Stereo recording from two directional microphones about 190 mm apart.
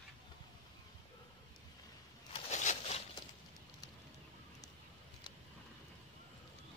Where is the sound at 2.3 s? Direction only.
40° left (ahead or behind).